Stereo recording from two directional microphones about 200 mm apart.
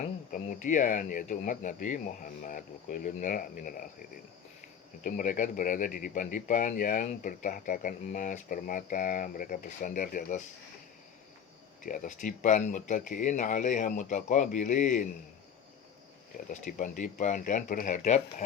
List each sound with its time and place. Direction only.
0.0 s speech: 40° left (ahead or behind)
5.0 s speech: 40° left (ahead or behind)
11.8 s speech: 40° left (ahead or behind)
16.5 s speech: 40° left (ahead or behind)